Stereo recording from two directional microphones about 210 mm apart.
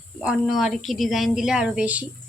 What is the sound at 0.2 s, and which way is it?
A woman's voice, centre (ahead or behind).